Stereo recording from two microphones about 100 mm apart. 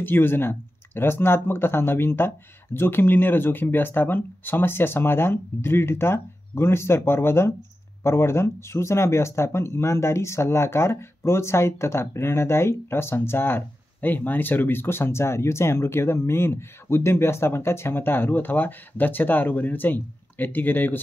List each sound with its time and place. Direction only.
0.0 s speech: 20° left (ahead or behind)